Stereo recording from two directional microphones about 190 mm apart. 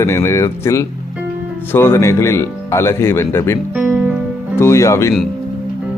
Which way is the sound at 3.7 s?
5° right (ahead or behind).